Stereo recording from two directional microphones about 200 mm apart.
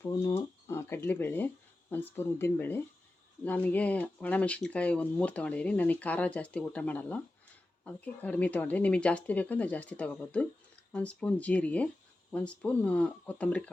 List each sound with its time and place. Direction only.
0.0 s speech: 15° left (ahead or behind)